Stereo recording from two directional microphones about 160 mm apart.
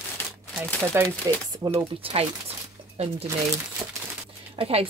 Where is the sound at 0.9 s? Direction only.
15° right (ahead or behind).